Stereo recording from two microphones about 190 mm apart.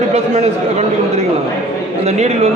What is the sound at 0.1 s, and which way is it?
A man's voice, 35° right (ahead or behind).